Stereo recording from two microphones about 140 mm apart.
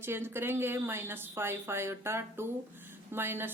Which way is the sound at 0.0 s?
15° right (ahead or behind).